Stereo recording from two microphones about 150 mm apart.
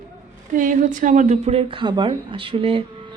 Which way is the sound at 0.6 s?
60° right (ahead or behind).